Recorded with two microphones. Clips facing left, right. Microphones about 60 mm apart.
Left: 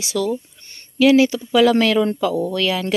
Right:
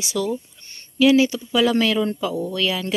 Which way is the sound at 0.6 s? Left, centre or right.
Left.